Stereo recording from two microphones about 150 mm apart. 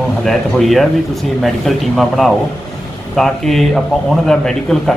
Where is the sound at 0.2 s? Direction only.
Centre (ahead or behind).